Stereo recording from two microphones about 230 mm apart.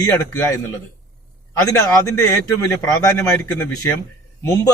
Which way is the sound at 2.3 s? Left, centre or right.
Centre.